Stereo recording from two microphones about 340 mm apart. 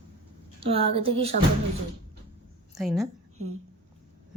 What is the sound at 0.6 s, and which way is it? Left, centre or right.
Speech, centre.